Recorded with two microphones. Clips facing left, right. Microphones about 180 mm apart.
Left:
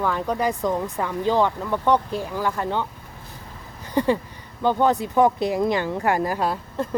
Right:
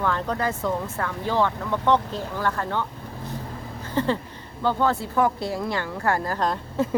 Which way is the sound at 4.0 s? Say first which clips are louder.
Left 3 dB; 15° left (ahead or behind).